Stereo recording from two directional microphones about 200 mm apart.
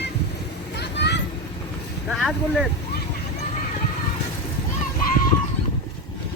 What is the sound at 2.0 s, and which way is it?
Speech, centre (ahead or behind).